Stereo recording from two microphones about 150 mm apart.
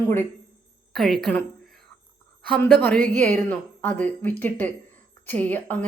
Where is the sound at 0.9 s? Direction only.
Centre (ahead or behind).